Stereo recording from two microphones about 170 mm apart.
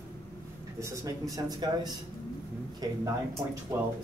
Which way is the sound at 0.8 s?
20° right (ahead or behind).